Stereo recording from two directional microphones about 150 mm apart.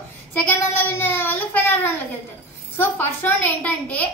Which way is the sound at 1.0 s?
15° left (ahead or behind).